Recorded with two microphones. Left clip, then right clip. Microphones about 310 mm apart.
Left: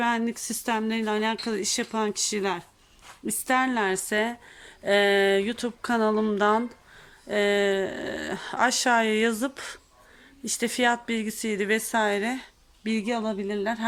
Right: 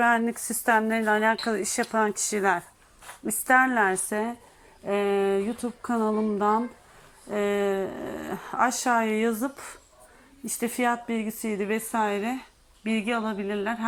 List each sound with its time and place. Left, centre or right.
0.0 s speech: centre